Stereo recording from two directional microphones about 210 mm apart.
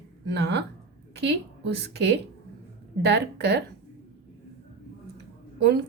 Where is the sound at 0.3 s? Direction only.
50° right (ahead or behind).